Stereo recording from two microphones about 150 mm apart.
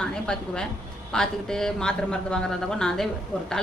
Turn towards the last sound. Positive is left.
turn(degrees=10)  # may be behind; listen again after turning